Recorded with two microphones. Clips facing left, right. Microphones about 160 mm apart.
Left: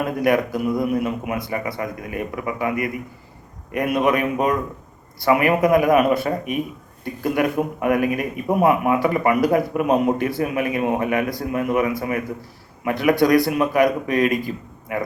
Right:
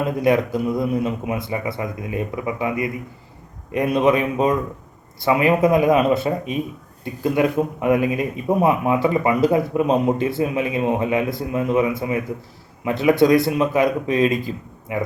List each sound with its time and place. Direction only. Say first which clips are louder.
0.2 s speech: right 1 dB; 25° right (ahead or behind)